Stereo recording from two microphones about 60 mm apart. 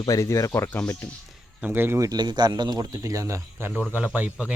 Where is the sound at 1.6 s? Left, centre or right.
Right.